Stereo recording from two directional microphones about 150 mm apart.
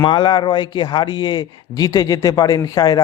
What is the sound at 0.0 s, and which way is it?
A man's voice, 30° left (ahead or behind).